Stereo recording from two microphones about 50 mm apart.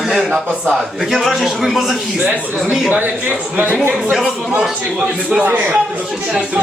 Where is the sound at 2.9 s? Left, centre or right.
Right.